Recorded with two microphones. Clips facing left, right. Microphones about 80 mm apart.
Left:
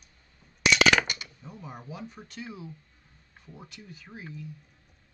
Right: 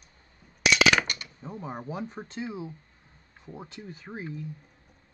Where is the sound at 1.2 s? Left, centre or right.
Right.